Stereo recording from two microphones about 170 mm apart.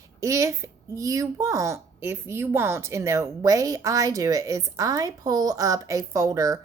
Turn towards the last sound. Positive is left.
turn(degrees=-20)  # may be behind; listen again after turning